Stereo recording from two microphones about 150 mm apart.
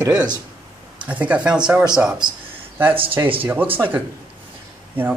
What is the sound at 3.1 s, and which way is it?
Speech, 35° right (ahead or behind).